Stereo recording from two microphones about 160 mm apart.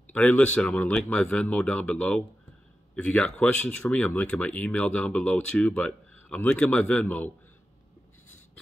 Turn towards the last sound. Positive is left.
turn(degrees=10)  # may be behind; listen again after turning